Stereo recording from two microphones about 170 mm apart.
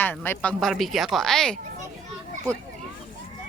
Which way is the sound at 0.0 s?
10° left (ahead or behind).